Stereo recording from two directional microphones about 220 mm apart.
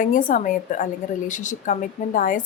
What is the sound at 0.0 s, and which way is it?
A woman's voice, 35° left (ahead or behind).